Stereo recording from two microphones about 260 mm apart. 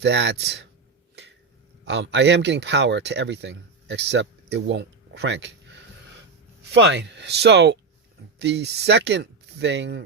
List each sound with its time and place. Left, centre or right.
0.0 s speech: right
1.8 s speech: right